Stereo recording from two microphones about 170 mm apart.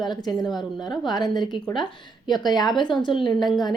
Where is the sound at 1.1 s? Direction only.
25° left (ahead or behind).